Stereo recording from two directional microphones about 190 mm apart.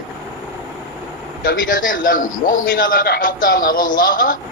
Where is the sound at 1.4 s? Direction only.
45° left (ahead or behind).